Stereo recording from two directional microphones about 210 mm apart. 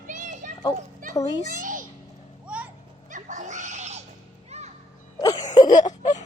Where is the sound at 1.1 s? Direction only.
15° left (ahead or behind).